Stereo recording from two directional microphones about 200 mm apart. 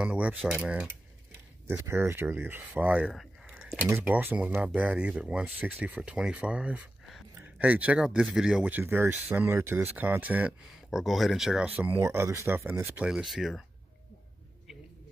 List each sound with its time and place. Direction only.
0.0 s speech: 5° right (ahead or behind)